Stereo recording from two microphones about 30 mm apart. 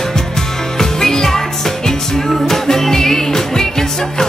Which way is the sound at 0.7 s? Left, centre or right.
Centre.